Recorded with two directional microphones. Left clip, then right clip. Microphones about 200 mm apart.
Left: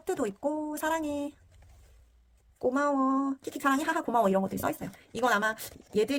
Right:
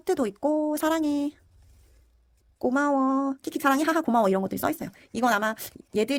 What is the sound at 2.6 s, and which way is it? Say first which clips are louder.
Speech: right 3 dB; 45° right (ahead or behind).